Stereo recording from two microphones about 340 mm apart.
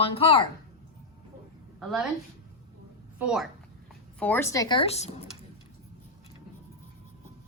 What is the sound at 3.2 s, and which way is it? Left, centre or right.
A woman's voice, centre.